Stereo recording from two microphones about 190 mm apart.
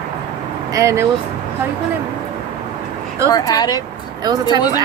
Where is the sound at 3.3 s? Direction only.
20° left (ahead or behind).